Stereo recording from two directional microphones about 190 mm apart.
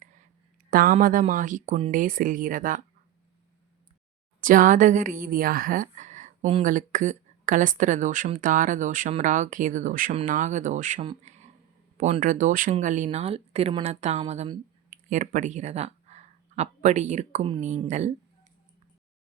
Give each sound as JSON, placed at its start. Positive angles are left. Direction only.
{"t": 0.0, "sound": "a sound", "side_deg": -40}
{"t": 0.7, "sound": "a woman's voice", "side_deg": -50}
{"t": 4.4, "sound": "a woman's voice", "side_deg": -45}
{"t": 14.8, "sound": "speech", "side_deg": -40}